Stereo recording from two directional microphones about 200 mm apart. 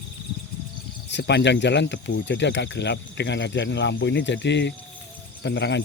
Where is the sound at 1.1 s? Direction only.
60° left (ahead or behind).